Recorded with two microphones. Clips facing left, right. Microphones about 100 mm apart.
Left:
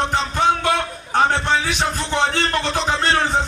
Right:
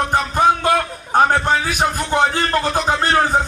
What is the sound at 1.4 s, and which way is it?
Speech, 35° right (ahead or behind).